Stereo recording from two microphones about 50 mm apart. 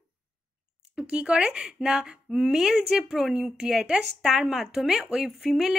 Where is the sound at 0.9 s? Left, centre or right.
Right.